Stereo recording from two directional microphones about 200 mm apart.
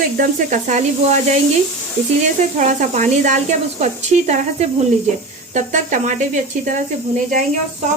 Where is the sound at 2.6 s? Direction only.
35° right (ahead or behind).